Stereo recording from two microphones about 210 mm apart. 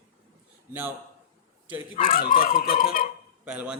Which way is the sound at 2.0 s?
40° left (ahead or behind).